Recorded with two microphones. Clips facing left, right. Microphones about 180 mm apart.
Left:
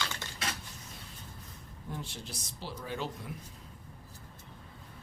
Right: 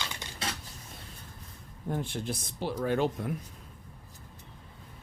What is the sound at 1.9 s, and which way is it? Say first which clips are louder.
Speech: right 9 dB; 55° right (ahead or behind).